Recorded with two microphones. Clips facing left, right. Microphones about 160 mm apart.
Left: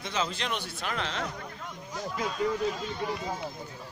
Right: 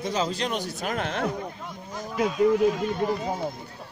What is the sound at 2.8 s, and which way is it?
Speech, 50° right (ahead or behind).